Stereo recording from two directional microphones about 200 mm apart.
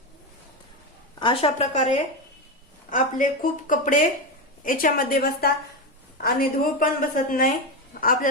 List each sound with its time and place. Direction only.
1.2 s a woman's voice: 25° left (ahead or behind); by 8.3 s 40° left (ahead or behind)